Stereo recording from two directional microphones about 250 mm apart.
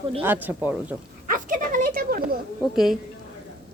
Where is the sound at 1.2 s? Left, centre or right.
Right.